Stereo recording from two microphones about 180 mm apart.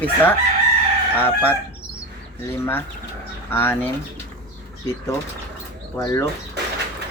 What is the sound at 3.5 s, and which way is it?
Speech, 15° left (ahead or behind).